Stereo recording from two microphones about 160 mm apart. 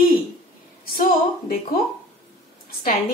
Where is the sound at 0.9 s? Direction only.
70° left (ahead or behind).